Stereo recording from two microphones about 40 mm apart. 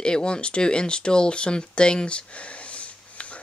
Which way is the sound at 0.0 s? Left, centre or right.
Left.